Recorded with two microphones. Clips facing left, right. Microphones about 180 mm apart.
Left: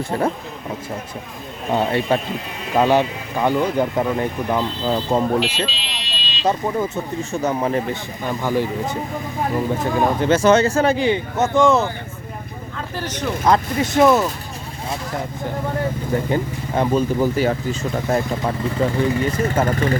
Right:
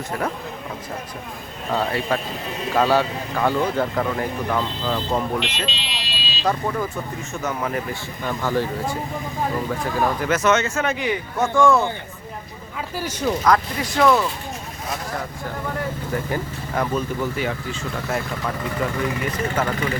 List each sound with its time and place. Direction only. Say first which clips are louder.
0.1 s speech: left 5 dB; 30° left (ahead or behind)
1.7 s speech: left 4 dB; 25° left (ahead or behind)
5.6 s buzzer: left 1 dB; centre (ahead or behind)
6.4 s speech: left 3 dB; 20° left (ahead or behind)
8.3 s speech: left 2 dB; 15° left (ahead or behind)
13.0 s speech: left 1 dB; 10° right (ahead or behind)
13.4 s speech: left 5 dB; 25° left (ahead or behind)
16.1 s speech: left 5 dB; 25° left (ahead or behind)